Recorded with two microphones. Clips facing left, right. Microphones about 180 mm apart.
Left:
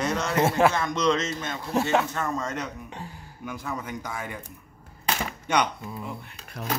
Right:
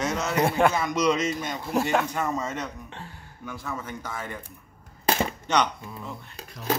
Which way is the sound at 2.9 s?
15° left (ahead or behind).